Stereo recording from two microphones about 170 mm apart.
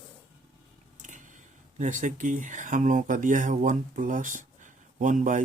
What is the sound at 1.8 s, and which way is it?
Speech, 45° right (ahead or behind).